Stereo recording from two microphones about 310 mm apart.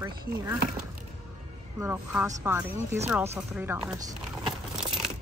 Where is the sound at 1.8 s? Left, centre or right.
Centre.